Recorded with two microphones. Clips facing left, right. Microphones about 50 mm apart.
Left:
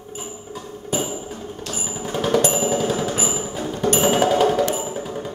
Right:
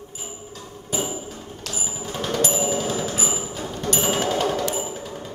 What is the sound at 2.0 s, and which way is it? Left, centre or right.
Music, centre.